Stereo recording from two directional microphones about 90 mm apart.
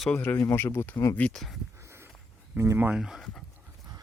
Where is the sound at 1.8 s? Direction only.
30° right (ahead or behind).